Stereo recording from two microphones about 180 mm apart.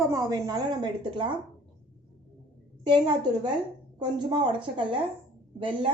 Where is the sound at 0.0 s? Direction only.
15° right (ahead or behind).